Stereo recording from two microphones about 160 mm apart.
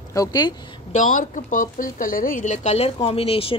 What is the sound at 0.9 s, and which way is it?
A woman's voice, 50° left (ahead or behind).